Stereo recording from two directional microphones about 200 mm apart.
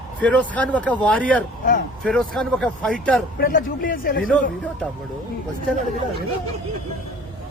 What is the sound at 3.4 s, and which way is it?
Speech, 45° left (ahead or behind).